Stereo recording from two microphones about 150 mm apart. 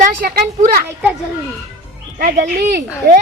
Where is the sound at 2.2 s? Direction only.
80° right.